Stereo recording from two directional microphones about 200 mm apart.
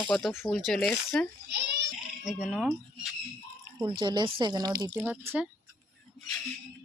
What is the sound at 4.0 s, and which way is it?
Speech, 20° right (ahead or behind).